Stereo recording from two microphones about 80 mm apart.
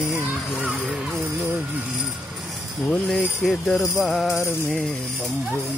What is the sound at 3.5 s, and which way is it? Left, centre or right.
Speech, centre.